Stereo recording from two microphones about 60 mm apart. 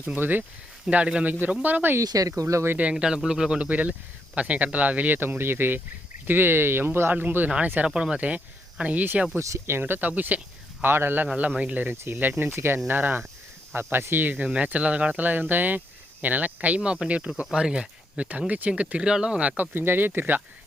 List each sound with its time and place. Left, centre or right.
0.2 s speech: right
0.9 s speech: centre
2.0 s speech: right
2.9 s speech: centre; by 7.5 s right
7.9 s speech: centre
9.6 s speech: right
10.8 s speech: right
11.5 s speech: right
11.9 s speech: right
14.4 s speech: right
19.7 s speech: right